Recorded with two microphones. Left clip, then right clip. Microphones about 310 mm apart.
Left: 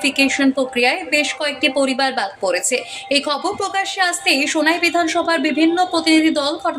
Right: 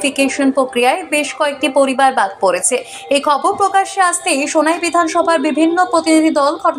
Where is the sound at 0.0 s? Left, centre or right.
Centre.